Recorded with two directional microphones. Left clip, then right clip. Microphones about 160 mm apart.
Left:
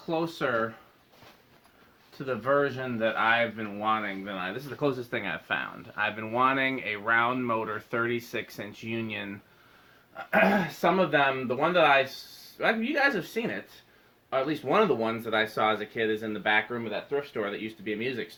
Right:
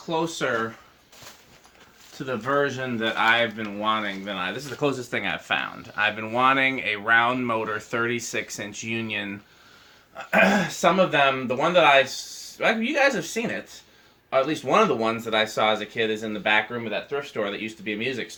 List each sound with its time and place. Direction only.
0.4 s speech: 30° left (ahead or behind)
2.1 s speech: 30° left (ahead or behind)
10.3 s speech: 30° left (ahead or behind)